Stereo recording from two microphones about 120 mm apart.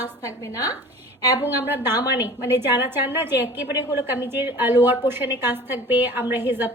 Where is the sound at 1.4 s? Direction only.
15° right (ahead or behind).